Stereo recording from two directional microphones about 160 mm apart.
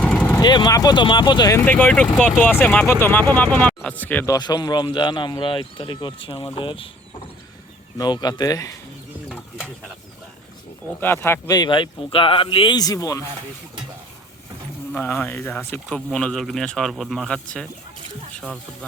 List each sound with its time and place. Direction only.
0.0 s vehicle: 5° left (ahead or behind)
0.5 s speech: 25° left (ahead or behind)
1.6 s speech: 10° left (ahead or behind)
4.4 s speech: 25° left (ahead or behind)
7.9 s speech: 25° left (ahead or behind)
11.0 s speech: 15° left (ahead or behind)
14.9 s speech: 15° left (ahead or behind)